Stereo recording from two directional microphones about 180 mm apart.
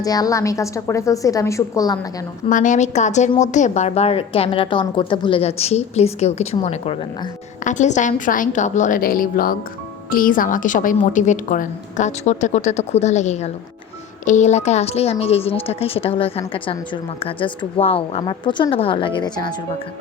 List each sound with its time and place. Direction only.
0.0 s a woman's voice: 20° left (ahead or behind)
2.5 s a woman's voice: 45° left (ahead or behind); by 19.5 s 25° left (ahead or behind)